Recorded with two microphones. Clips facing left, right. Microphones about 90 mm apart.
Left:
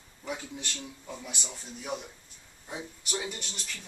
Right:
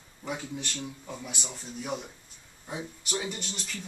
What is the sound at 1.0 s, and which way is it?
Speech, 5° right (ahead or behind).